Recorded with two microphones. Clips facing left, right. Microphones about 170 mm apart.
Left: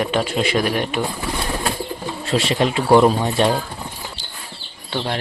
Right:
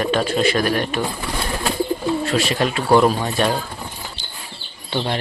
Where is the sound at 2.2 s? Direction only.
25° left (ahead or behind).